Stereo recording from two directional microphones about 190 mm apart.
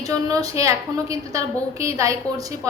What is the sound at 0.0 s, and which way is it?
A woman's voice, 20° right (ahead or behind).